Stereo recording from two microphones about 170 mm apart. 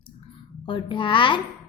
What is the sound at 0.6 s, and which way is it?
Speech, 30° left (ahead or behind).